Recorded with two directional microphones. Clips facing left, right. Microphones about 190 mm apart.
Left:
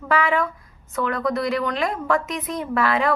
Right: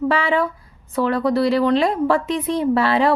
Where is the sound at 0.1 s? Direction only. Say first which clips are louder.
Right 2 dB; 30° right (ahead or behind).